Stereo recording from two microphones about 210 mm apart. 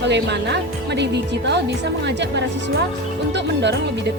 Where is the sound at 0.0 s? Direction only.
55° right (ahead or behind).